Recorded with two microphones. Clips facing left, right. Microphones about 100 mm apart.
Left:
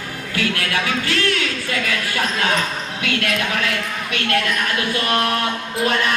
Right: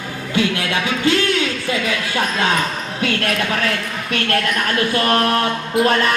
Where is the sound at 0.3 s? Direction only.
20° right (ahead or behind).